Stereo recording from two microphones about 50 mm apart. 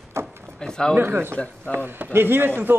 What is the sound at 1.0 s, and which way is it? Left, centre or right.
Speech, right.